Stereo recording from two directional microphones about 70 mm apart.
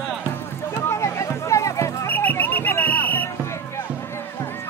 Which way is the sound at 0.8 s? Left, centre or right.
Left.